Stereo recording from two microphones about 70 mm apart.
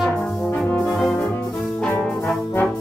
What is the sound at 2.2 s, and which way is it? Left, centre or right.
Brass instrument, left.